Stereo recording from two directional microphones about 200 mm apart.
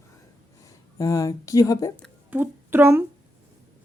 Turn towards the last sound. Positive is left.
turn(degrees=-10)  # may be behind; listen again after turning